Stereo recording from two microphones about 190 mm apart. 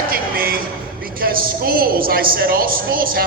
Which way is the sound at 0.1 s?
50° right (ahead or behind).